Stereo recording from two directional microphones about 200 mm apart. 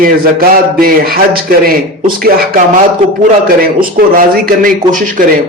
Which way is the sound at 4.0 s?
45° right (ahead or behind).